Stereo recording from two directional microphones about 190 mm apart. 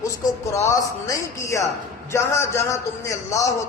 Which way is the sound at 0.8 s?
15° left (ahead or behind).